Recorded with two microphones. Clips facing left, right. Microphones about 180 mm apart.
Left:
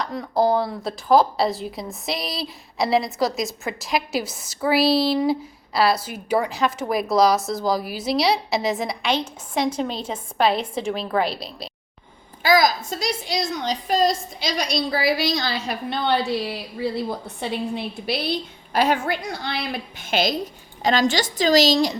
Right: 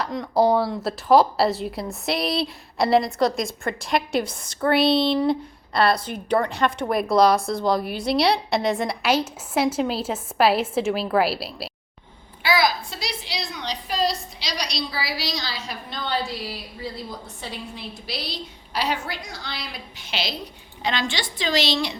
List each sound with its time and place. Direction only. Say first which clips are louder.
0.0 s a woman's voice: right 1 dB; centre (ahead or behind)
12.4 s a woman's voice: left 4 dB; 40° left (ahead or behind)